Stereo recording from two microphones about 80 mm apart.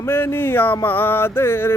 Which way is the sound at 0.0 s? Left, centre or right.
Left.